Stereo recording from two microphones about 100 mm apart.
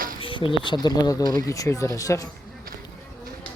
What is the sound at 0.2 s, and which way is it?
Speech, 60° left (ahead or behind).